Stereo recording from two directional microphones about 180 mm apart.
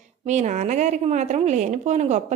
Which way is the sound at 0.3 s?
40° right (ahead or behind).